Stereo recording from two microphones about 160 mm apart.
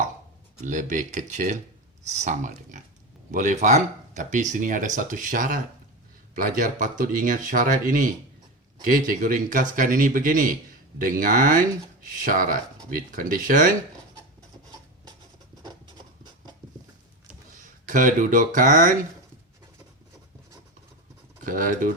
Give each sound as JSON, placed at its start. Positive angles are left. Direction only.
{"t": 0.6, "sound": "speech", "side_deg": -50}
{"t": 17.8, "sound": "speech", "side_deg": -55}
{"t": 21.4, "sound": "speech", "side_deg": -60}